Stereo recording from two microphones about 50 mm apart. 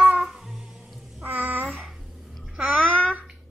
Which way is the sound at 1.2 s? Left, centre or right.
Right.